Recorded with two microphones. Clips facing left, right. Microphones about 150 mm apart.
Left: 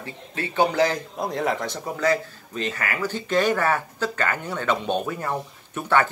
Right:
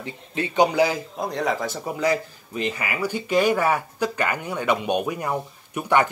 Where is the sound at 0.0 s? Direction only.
20° right (ahead or behind).